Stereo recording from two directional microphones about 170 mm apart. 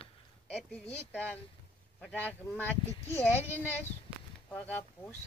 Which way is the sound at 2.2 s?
10° left (ahead or behind).